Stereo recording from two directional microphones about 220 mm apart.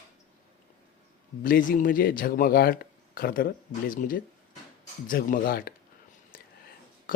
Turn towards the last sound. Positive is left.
turn(degrees=40)  # may be behind; listen again after turning